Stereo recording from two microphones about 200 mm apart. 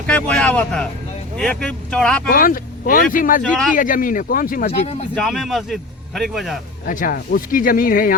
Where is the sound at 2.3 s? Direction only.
45° left (ahead or behind).